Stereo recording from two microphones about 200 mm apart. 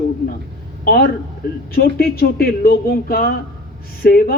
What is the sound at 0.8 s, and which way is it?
A man's voice, 50° left (ahead or behind).